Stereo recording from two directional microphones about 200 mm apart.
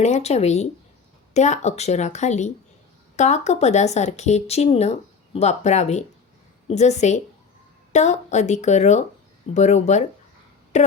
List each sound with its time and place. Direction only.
0.0 s a woman's voice: 35° left (ahead or behind)